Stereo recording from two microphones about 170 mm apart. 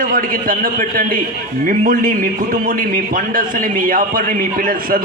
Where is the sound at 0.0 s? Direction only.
55° right (ahead or behind).